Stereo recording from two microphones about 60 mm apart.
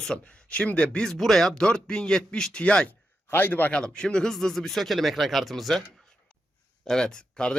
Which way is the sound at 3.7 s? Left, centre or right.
Centre.